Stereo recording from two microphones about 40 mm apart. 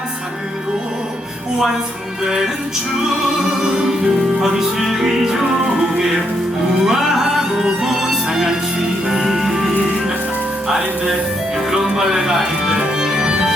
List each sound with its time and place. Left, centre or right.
4.4 s music: centre
6.8 s music: centre